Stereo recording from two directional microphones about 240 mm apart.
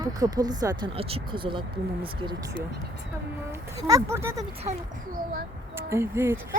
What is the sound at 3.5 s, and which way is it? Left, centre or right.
Speech, centre.